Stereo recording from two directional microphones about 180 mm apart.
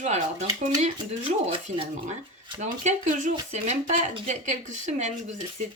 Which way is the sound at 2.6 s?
40° right (ahead or behind).